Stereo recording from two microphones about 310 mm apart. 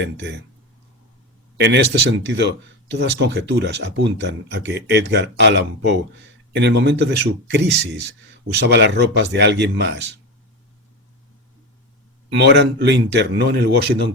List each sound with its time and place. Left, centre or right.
0.0 s speech: right
1.5 s speech: right
12.3 s speech: right